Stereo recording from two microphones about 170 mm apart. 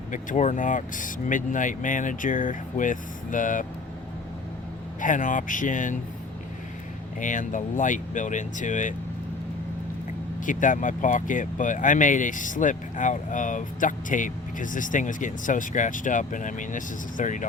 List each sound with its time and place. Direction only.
0.1 s speech: 45° left (ahead or behind)
4.9 s speech: 50° left (ahead or behind)
7.2 s speech: 50° left (ahead or behind)
10.4 s speech: 50° left (ahead or behind)